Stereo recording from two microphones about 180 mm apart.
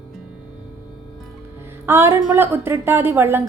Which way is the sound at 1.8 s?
15° right (ahead or behind).